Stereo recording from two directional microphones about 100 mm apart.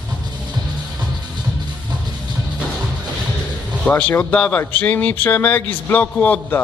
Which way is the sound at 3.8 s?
15° left (ahead or behind).